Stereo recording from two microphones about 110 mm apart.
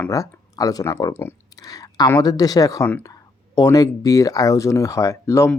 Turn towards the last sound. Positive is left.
turn(degrees=25)  # may be behind; listen again after turning